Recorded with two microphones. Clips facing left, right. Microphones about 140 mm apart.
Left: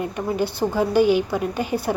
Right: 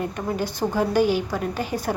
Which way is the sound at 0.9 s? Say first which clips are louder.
Left 4 dB; 45° right (ahead or behind).